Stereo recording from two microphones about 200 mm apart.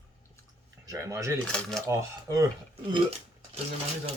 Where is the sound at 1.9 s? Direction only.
15° right (ahead or behind).